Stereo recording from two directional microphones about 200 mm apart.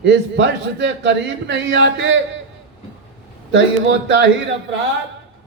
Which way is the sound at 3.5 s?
65° right (ahead or behind).